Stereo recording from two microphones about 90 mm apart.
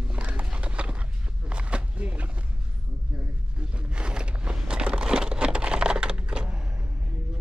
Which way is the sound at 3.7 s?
10° right (ahead or behind).